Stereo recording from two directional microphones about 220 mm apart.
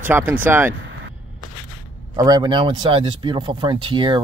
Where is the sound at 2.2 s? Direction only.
20° right (ahead or behind).